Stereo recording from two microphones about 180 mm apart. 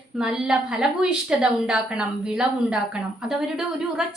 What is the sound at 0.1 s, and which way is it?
A woman's voice, 5° right (ahead or behind).